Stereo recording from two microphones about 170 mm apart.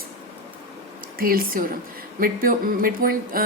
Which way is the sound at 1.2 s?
60° right (ahead or behind).